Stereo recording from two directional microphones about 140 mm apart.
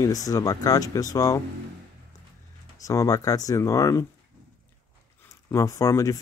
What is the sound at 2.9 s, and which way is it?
Speech, 25° left (ahead or behind).